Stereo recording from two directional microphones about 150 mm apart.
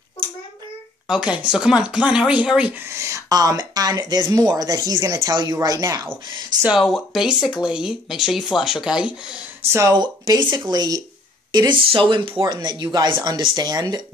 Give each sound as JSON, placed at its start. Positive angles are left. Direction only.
{"t": 1.0, "sound": "speech", "side_deg": -5}
{"t": 2.9, "sound": "speech", "side_deg": -20}
{"t": 6.8, "sound": "speech", "side_deg": 0}
{"t": 9.7, "sound": "speech", "side_deg": -20}